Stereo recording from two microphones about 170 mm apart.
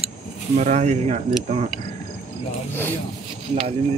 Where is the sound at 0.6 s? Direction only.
45° right (ahead or behind).